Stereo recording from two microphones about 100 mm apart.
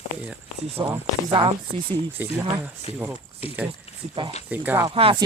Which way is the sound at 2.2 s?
20° right (ahead or behind).